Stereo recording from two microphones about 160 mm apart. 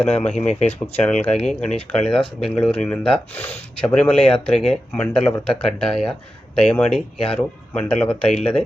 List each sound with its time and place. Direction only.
0.3 s speech: 45° left (ahead or behind)
1.0 s speech: 10° left (ahead or behind)